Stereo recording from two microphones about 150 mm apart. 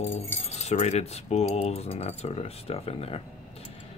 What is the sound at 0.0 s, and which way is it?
Speech, 45° left (ahead or behind).